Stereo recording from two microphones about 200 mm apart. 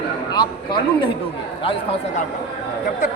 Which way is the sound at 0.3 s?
25° left (ahead or behind).